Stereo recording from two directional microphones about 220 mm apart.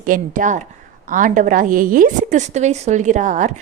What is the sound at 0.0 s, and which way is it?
A woman's voice, 35° right (ahead or behind).